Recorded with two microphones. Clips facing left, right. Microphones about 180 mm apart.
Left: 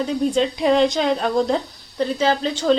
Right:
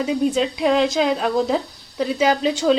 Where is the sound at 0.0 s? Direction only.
5° right (ahead or behind).